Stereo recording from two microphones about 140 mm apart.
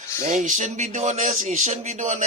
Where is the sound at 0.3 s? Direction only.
65° right (ahead or behind).